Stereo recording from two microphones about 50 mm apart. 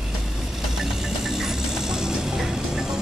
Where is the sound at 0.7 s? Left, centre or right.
Centre.